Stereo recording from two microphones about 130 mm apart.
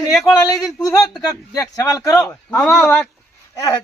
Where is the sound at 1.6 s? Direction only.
25° left (ahead or behind).